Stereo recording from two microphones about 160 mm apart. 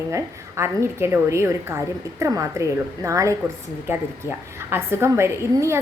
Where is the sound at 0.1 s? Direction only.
15° right (ahead or behind).